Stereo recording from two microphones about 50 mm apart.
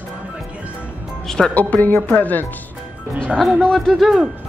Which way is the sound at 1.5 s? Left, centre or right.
Left.